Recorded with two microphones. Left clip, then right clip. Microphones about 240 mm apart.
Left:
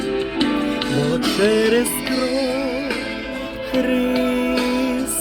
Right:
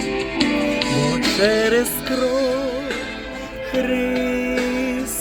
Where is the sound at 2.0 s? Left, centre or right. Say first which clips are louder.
Right 1 dB; left.